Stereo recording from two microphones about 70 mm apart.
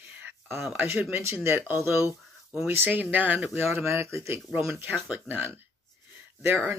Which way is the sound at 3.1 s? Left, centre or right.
Right.